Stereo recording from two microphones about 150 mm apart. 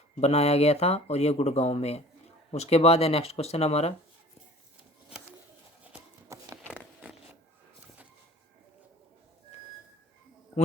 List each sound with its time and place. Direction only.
0.2 s speech: 45° left (ahead or behind)
5.8 s horse: 15° right (ahead or behind)